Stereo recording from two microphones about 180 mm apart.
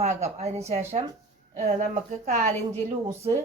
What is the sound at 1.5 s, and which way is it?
Speech, 40° right (ahead or behind).